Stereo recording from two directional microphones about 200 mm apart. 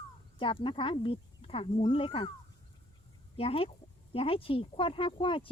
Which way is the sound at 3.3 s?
30° left (ahead or behind).